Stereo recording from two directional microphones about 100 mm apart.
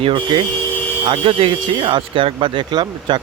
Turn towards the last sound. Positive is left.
turn(degrees=-50)  # may be behind; listen again after turning